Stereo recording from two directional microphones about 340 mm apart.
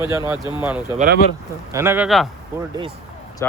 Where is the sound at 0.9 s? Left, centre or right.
Right.